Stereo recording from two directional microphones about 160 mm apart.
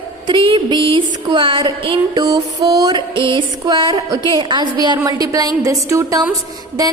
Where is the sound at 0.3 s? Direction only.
30° right (ahead or behind).